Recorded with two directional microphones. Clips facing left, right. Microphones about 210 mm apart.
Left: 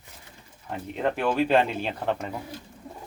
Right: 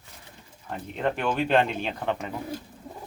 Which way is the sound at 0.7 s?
5° left (ahead or behind).